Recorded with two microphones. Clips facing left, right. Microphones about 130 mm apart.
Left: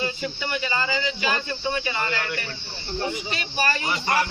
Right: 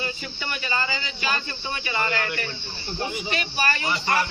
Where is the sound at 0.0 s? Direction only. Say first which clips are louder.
Left 4 dB; 20° left (ahead or behind).